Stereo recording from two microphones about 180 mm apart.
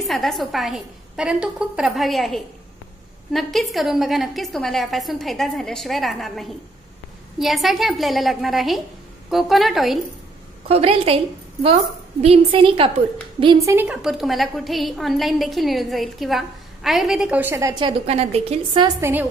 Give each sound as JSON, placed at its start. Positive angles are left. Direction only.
{"t": 0.0, "sound": "a woman's voice", "side_deg": 0}
{"t": 10.7, "sound": "a woman's voice", "side_deg": -30}
{"t": 13.7, "sound": "a woman's voice", "side_deg": -10}
{"t": 18.9, "sound": "a woman's voice", "side_deg": -15}